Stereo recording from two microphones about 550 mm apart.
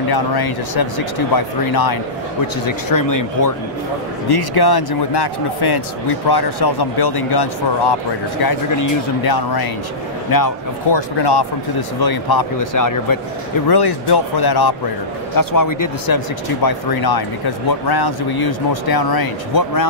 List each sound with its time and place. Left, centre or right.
0.1 s speech: left